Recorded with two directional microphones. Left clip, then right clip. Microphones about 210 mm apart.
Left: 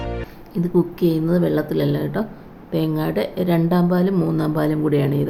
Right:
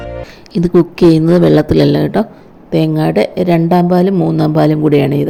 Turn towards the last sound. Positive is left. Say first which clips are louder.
# right 8 dB
turn(degrees=-25)  # may be behind; listen again after turning